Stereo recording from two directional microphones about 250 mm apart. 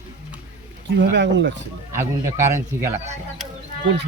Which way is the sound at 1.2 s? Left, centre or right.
Right.